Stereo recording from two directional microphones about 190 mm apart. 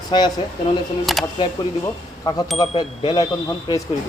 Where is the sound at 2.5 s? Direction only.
30° left (ahead or behind).